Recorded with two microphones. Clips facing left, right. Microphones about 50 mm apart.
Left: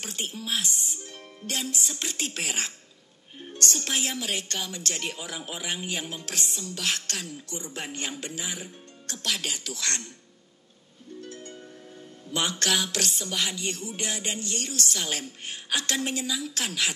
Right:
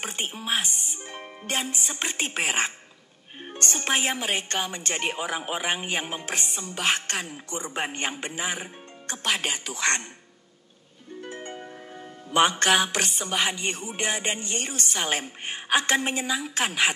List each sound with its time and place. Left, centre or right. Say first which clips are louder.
0.0 s a woman's voice: right 3 dB; right
11.1 s harp: right 5 dB; right
12.3 s a woman's voice: right 7 dB; right